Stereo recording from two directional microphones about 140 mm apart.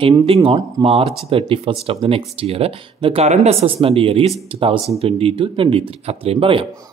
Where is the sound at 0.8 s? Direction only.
40° right (ahead or behind).